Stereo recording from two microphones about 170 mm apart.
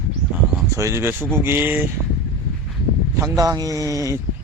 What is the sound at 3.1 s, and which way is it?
Speech, 20° right (ahead or behind).